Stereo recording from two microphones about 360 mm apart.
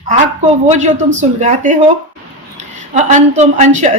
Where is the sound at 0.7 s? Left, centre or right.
Centre.